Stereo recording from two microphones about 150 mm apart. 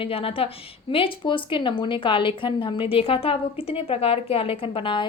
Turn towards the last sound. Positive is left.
turn(degrees=35)  # may be behind; listen again after turning